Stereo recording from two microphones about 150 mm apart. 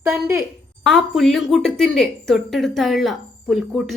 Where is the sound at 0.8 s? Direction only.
Centre (ahead or behind).